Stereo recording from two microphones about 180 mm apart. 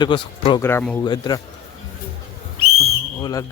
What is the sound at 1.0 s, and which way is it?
Speech, 25° left (ahead or behind).